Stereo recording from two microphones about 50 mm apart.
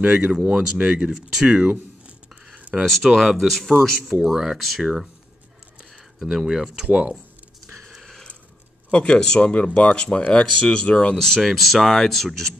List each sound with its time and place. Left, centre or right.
0.0 s speech: right
1.5 s a sound: right
2.8 s speech: centre
6.1 s speech: centre
6.4 s speech: centre
8.0 s a sound: centre
8.9 s speech: centre
11.1 s speech: centre